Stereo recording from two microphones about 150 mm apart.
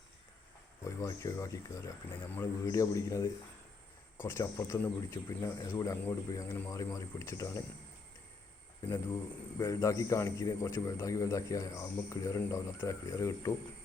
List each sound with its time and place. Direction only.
0.9 s a man's voice: 20° left (ahead or behind)
9.6 s a man's voice: 20° left (ahead or behind)